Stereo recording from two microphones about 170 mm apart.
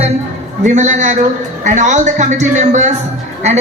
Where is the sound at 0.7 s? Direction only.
45° right (ahead or behind).